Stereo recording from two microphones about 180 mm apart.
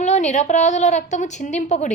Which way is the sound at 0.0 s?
40° left (ahead or behind).